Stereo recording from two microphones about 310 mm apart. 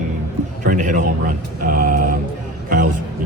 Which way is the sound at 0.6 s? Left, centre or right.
Right.